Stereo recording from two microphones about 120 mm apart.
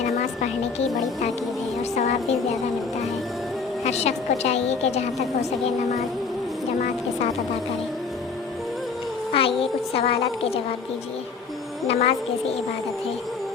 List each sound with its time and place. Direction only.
3.8 s a woman's voice: 65° left (ahead or behind)
9.3 s a woman's voice: 50° left (ahead or behind)
11.9 s a woman's voice: 55° left (ahead or behind)